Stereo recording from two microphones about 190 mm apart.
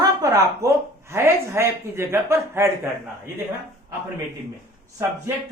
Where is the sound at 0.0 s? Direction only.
15° right (ahead or behind).